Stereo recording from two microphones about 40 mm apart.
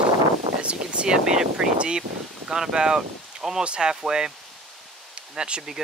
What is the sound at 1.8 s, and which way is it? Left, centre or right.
Speech, right.